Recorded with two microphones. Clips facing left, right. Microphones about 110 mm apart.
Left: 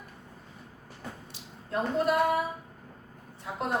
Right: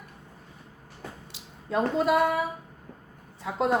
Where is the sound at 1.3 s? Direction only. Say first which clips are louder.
Right 5 dB; 90° right.